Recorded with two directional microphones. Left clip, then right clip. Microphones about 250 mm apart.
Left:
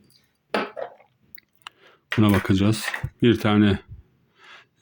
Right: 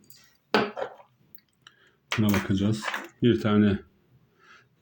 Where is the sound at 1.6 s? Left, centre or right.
Left.